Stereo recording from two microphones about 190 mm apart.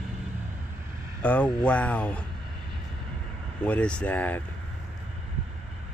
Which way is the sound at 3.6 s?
5° left (ahead or behind).